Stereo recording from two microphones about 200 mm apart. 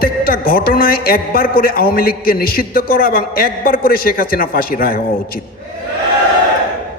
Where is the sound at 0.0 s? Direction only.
45° left (ahead or behind).